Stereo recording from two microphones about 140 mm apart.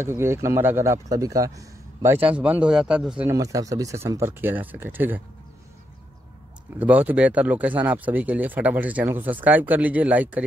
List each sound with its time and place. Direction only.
0.0 s speech: 20° right (ahead or behind)
2.1 s speech: 10° right (ahead or behind)
3.3 s speech: 25° right (ahead or behind)
6.8 s speech: 10° right (ahead or behind)